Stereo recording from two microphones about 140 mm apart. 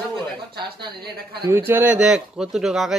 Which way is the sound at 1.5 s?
15° right (ahead or behind).